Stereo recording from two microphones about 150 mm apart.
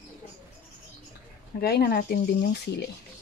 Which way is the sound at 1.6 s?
90° left.